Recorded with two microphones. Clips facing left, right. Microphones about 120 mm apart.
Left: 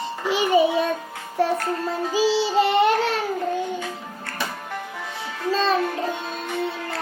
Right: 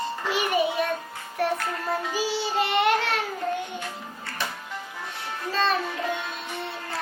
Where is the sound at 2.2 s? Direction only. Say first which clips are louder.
Left 8 dB; 90° left.